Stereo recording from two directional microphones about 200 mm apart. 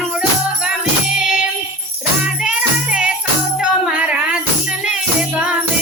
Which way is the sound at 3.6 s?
5° right (ahead or behind).